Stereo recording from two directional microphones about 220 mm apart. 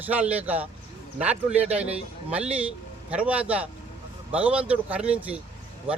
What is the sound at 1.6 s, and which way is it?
Speech, 30° right (ahead or behind).